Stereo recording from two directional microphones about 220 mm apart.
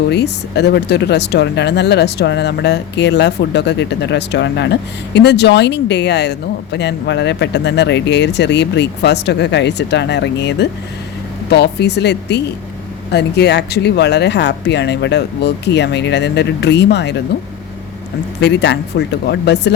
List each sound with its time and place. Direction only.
0.1 s speech: 50° left (ahead or behind)
18.3 s speech: 50° left (ahead or behind)